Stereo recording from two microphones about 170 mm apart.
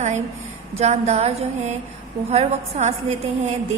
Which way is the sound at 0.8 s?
40° right (ahead or behind).